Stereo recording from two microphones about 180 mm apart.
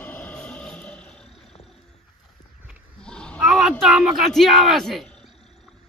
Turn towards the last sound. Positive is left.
turn(degrees=0)  # may be behind; listen again after turning